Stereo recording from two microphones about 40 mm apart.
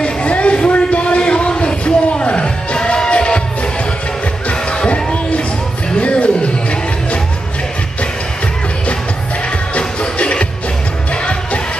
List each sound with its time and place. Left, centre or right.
0.0 s a sound: left
4.8 s music: left
9.8 s music: left